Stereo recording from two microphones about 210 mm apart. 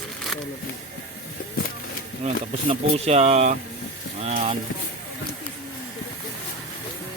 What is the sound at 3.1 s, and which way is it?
Speech, 35° right (ahead or behind).